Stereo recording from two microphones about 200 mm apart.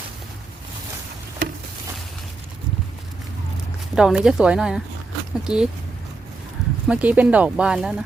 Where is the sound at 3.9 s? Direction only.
5° right (ahead or behind).